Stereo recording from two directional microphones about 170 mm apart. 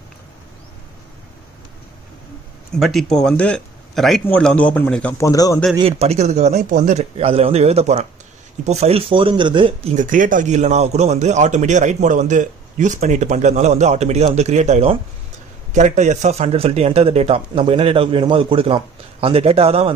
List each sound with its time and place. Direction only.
2.7 s speech: centre (ahead or behind)
5.2 s a man's voice: 20° left (ahead or behind)
5.8 s speech: 35° right (ahead or behind)
10.0 s a man's voice: 50° right (ahead or behind); by 19.9 s 35° right (ahead or behind)